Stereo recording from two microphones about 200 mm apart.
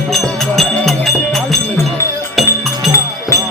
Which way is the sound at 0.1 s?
Centre (ahead or behind).